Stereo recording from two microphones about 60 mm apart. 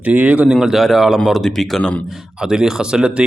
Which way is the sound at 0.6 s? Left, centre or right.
Centre.